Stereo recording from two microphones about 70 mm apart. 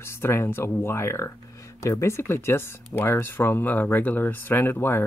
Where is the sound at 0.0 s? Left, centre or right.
Left.